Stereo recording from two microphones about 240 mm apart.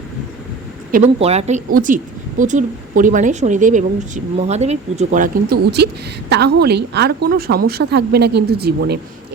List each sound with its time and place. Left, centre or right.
0.9 s speech: right